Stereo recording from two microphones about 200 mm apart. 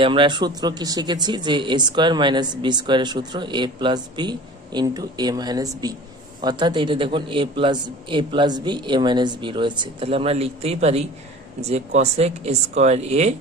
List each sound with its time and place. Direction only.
0.0 s speech: 25° right (ahead or behind)